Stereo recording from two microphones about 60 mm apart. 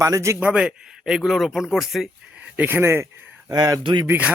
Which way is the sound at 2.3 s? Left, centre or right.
Right.